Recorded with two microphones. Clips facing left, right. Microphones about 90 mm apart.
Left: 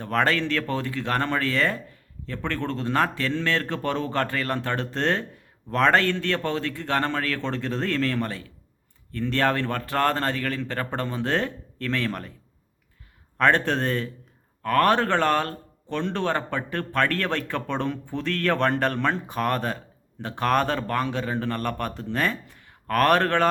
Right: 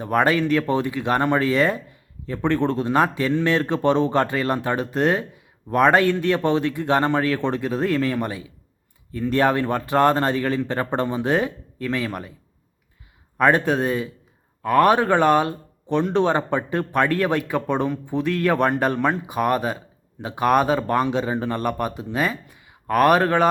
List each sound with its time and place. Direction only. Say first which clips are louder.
0.0 s a man's voice: right 4 dB; 15° right (ahead or behind)
13.3 s a man's voice: right 3 dB; 10° right (ahead or behind)